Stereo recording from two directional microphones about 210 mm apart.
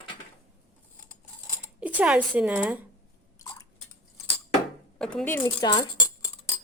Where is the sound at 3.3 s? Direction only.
15° left (ahead or behind).